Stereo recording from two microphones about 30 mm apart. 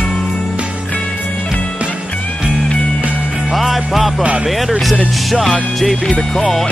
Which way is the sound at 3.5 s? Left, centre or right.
Centre.